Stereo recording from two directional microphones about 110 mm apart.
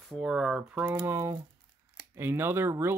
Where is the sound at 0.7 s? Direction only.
25° right (ahead or behind).